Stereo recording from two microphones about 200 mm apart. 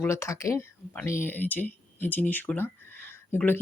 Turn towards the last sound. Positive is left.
turn(degrees=10)  # may be behind; listen again after turning